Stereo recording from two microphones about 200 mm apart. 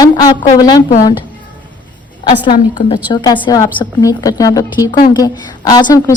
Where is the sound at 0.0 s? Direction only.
20° left (ahead or behind).